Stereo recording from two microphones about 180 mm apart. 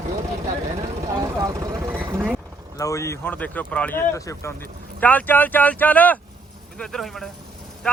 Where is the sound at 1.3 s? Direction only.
20° right (ahead or behind).